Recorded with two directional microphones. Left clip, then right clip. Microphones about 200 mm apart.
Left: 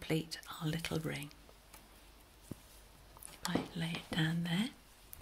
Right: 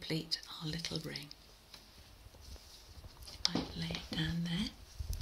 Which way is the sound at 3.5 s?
50° left (ahead or behind).